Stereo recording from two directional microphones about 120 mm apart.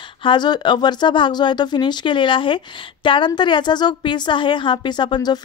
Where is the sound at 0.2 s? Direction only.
40° left (ahead or behind).